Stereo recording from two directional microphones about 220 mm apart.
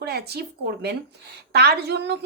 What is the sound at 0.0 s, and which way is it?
A woman's voice, 45° right (ahead or behind).